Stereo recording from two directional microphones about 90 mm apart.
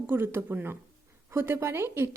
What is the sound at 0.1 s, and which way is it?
A woman's voice, 25° right (ahead or behind).